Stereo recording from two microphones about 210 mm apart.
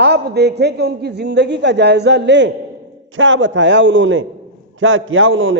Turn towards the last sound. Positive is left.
turn(degrees=-70)  # may be behind; listen again after turning